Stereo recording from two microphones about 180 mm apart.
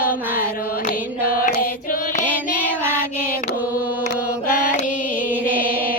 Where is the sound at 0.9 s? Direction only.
50° left (ahead or behind).